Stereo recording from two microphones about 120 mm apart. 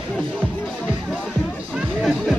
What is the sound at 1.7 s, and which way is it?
Music, centre (ahead or behind).